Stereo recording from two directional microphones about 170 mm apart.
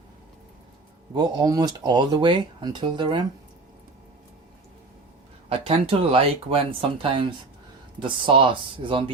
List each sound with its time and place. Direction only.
1.1 s speech: 25° right (ahead or behind)
5.5 s speech: 35° right (ahead or behind)